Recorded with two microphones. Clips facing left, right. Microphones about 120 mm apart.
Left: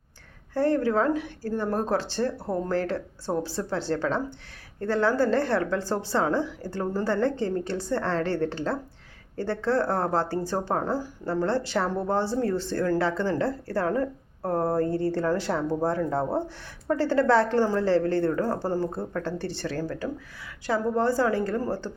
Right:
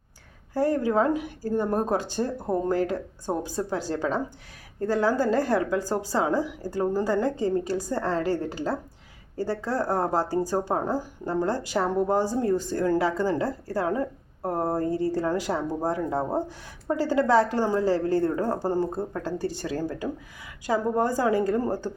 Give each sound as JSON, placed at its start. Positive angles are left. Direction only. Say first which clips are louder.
{"t": 0.5, "sound": "speech", "louder": "even", "side_deg": -10}